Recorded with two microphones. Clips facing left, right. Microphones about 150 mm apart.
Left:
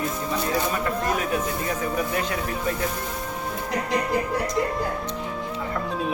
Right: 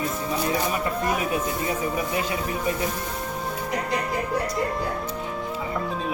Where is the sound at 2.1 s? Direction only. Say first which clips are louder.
Even; 10° right (ahead or behind).